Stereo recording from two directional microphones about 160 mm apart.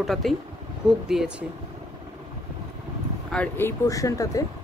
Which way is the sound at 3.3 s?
10° left (ahead or behind).